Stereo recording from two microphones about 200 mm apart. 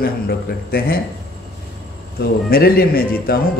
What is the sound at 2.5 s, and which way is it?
Speech, 50° left (ahead or behind).